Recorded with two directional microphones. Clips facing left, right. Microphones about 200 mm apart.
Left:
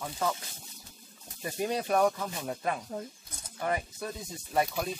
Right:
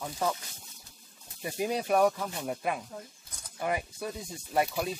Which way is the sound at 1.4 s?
10° right (ahead or behind).